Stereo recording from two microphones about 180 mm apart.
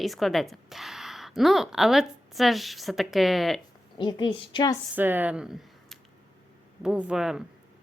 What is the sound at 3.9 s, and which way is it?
Speech, 25° left (ahead or behind).